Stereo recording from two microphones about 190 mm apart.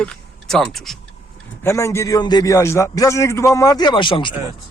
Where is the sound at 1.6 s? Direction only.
15° left (ahead or behind).